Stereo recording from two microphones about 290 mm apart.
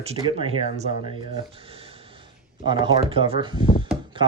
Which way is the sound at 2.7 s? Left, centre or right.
Centre.